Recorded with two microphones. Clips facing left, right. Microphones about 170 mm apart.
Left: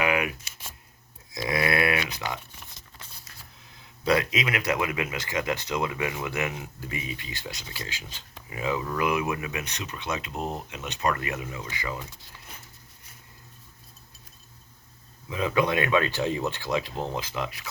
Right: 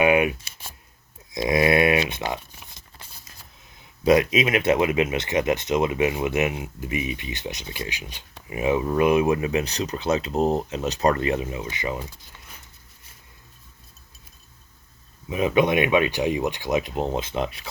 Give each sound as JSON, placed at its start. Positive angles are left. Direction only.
{"t": 0.0, "sound": "a sound", "side_deg": -25}
{"t": 1.3, "sound": "speech", "side_deg": -20}
{"t": 4.0, "sound": "speech", "side_deg": -20}
{"t": 15.3, "sound": "speech", "side_deg": -20}